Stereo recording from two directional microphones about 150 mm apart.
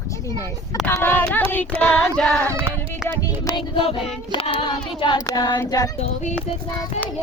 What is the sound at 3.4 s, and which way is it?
Child singing, 35° left (ahead or behind).